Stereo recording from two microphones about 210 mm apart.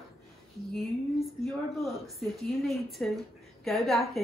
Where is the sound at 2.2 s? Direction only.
Centre (ahead or behind).